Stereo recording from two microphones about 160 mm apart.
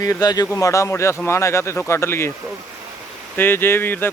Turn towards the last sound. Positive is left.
turn(degrees=15)  # may be behind; listen again after turning